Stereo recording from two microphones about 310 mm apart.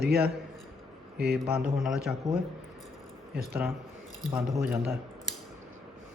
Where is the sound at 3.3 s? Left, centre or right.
Right.